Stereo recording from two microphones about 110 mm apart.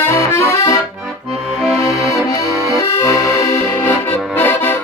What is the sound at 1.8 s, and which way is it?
Accordion, 25° left (ahead or behind).